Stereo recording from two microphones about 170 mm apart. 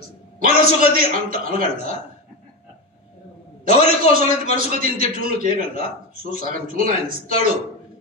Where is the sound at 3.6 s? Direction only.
55° right (ahead or behind).